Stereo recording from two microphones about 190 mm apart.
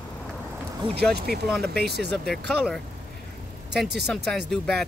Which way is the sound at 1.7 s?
60° right (ahead or behind).